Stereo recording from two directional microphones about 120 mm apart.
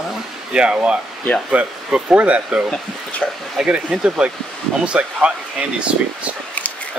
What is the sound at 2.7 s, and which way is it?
Speech, 10° left (ahead or behind).